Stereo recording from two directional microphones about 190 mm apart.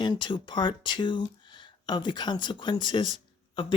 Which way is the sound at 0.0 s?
25° left (ahead or behind).